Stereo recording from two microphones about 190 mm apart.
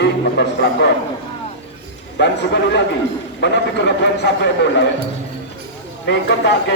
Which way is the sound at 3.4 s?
65° left (ahead or behind).